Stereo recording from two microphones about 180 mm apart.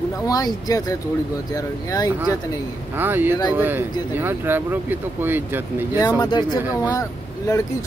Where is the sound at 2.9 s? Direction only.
10° right (ahead or behind).